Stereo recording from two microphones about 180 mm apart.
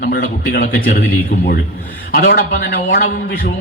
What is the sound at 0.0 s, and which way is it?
Speech, 60° left (ahead or behind).